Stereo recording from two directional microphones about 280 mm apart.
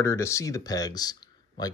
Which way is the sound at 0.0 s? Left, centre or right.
Centre.